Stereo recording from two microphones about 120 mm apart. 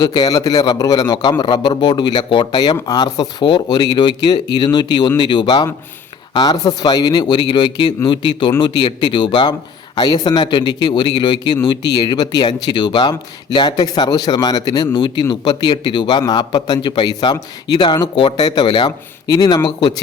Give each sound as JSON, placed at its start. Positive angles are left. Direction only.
{"t": 0.0, "sound": "a man's voice", "side_deg": 35}